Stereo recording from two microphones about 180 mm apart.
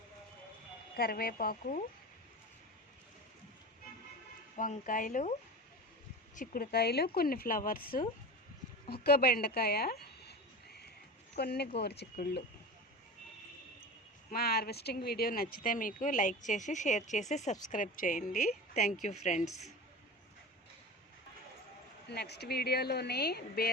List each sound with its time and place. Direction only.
0.9 s a woman's voice: 55° left (ahead or behind)
4.5 s speech: 45° left (ahead or behind)
6.3 s a woman's voice: 50° left (ahead or behind)
8.9 s a sound: 60° left (ahead or behind)
11.3 s a woman's voice: 65° left (ahead or behind)
14.3 s a woman's voice: 60° left (ahead or behind); by 19.5 s 40° left (ahead or behind)
22.1 s a woman's voice: 65° left (ahead or behind)